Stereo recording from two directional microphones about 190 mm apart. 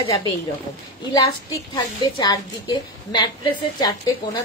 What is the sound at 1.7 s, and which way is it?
A woman's voice, 25° left (ahead or behind).